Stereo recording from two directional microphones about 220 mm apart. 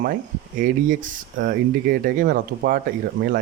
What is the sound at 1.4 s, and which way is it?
Speech, 40° right (ahead or behind).